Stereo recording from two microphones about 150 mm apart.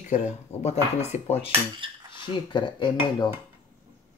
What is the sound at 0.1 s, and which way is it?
Speech, 50° left (ahead or behind).